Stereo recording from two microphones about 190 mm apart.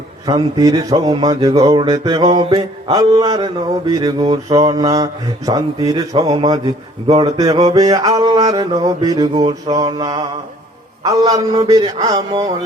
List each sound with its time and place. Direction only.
0.3 s speech: 20° right (ahead or behind)
7.1 s a sound: 35° right (ahead or behind)
7.3 s speech: 20° right (ahead or behind)